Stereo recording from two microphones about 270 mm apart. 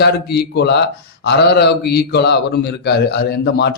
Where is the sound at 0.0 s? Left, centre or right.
Left.